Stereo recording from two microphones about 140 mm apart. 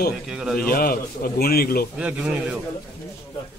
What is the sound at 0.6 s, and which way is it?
A man's voice, 90° left.